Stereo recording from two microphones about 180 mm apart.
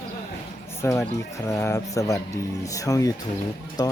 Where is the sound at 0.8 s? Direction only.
15° left (ahead or behind).